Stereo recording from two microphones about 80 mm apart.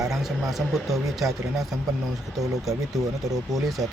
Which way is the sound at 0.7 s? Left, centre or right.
Centre.